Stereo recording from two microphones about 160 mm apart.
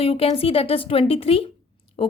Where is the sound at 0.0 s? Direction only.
35° left (ahead or behind).